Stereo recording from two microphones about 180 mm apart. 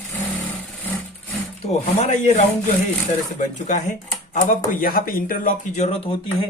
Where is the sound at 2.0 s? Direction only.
40° left (ahead or behind).